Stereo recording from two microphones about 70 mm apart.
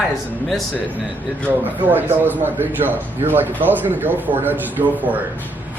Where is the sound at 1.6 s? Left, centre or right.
Right.